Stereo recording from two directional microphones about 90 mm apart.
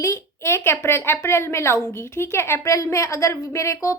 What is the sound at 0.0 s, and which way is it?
A woman's voice, 30° left (ahead or behind).